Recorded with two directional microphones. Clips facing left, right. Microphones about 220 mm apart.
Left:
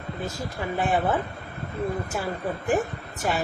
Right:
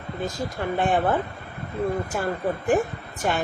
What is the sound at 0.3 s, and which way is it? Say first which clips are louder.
Speech: right 3 dB; 5° left (ahead or behind).